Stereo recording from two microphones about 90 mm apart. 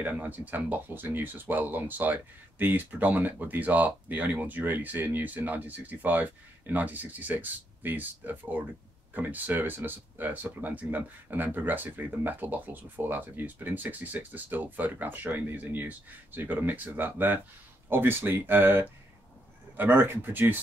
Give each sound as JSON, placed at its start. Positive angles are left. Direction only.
{"t": 0.0, "sound": "speech", "side_deg": -20}